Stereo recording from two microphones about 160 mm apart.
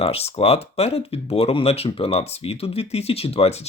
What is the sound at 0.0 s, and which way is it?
Speech, 40° left (ahead or behind).